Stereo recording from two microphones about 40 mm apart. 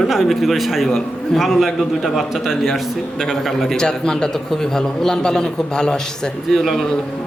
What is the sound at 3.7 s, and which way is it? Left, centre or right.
A man's voice, centre.